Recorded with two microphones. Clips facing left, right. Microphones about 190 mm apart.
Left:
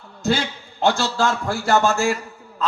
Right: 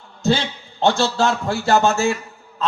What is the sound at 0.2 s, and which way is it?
A man's voice, 25° right (ahead or behind).